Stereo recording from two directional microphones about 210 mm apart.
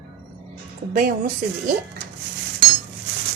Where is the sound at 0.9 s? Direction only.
40° right (ahead or behind).